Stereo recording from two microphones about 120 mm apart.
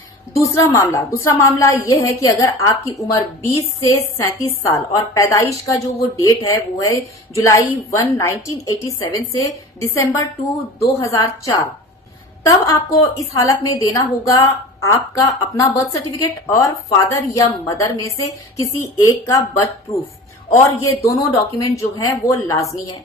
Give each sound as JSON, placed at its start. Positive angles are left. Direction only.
{"t": 0.3, "sound": "a woman's voice", "side_deg": 25}